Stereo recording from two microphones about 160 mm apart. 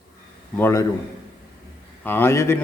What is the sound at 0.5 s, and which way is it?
Speech, 15° left (ahead or behind).